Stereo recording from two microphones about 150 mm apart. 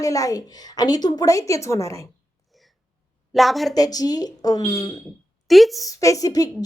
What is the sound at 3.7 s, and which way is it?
A woman's voice, 25° left (ahead or behind).